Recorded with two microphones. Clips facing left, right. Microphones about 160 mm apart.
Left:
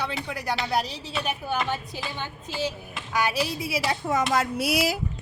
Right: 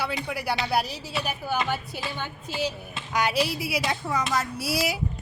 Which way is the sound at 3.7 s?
Centre (ahead or behind).